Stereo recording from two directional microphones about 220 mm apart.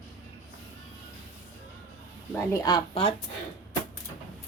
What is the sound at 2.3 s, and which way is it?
Speech, 15° left (ahead or behind).